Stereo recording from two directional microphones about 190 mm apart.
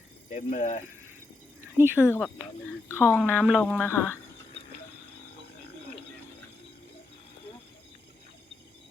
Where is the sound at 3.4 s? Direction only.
5° right (ahead or behind).